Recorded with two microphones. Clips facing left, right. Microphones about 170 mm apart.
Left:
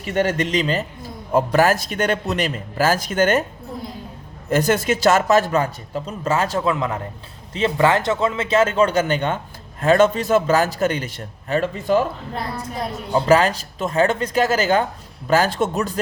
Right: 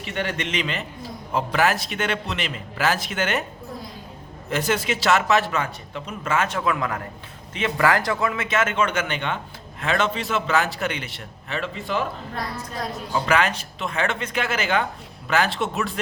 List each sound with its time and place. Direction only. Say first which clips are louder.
0.0 s a man's voice: left 7 dB; 45° left (ahead or behind)
4.4 s speech: left 6 dB; 45° left (ahead or behind)
6.7 s a man's voice: left 3 dB; 25° left (ahead or behind); by 12.0 s 45° left (ahead or behind)
13.1 s speech: left 6 dB; 35° left (ahead or behind)